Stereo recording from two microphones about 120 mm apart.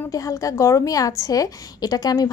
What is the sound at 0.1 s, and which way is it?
A woman's voice, 30° left (ahead or behind).